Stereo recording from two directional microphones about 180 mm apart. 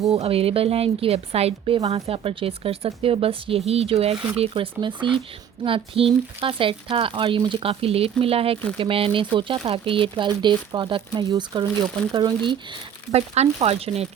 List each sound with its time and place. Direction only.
0.1 s a woman's voice: 35° right (ahead or behind)